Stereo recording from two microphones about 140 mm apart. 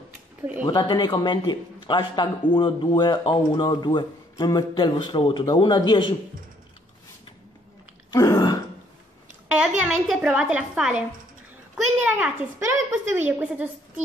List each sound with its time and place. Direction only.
0.7 s a man's voice: 30° left (ahead or behind)
8.1 s throat clearing: 25° left (ahead or behind)
9.5 s a woman's voice: 10° right (ahead or behind)
12.5 s a woman's voice: 20° right (ahead or behind)